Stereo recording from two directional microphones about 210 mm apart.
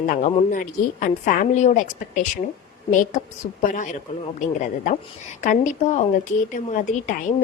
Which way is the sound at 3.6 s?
40° left (ahead or behind).